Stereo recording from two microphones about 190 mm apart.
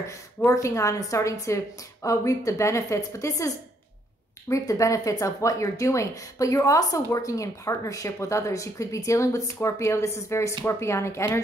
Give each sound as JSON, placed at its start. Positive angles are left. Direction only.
{"t": 0.0, "sound": "speech", "side_deg": 15}